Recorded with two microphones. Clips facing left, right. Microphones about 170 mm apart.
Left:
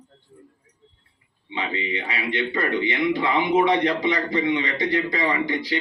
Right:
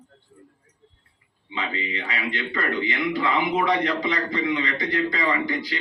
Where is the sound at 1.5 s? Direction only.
30° left (ahead or behind).